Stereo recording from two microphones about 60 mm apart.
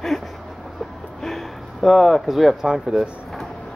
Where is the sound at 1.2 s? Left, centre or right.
Centre.